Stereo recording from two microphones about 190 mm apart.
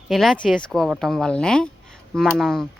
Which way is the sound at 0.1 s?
Centre (ahead or behind).